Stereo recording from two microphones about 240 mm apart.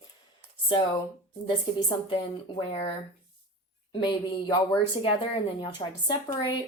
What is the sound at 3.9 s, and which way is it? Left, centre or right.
A woman's voice, centre.